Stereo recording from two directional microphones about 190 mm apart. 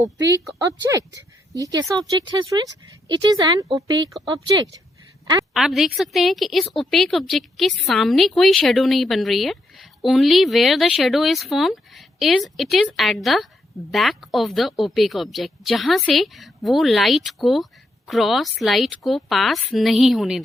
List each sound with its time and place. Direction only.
0.0 s speech: 20° right (ahead or behind)
5.2 s a sound: 20° right (ahead or behind)
5.5 s a woman's voice: centre (ahead or behind)